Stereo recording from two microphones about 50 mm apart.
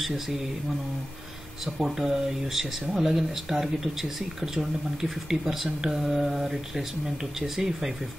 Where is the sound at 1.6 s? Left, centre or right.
Centre.